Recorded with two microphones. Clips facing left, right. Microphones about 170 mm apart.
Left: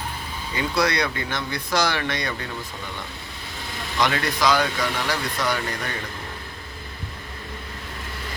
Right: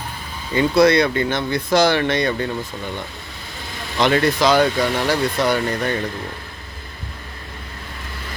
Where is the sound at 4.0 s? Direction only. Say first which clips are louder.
Right 6 dB; 30° right (ahead or behind).